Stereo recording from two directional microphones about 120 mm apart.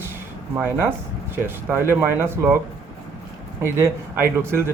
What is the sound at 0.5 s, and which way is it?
Speech, 20° right (ahead or behind).